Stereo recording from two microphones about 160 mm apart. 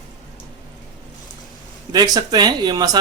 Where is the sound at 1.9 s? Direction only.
25° right (ahead or behind).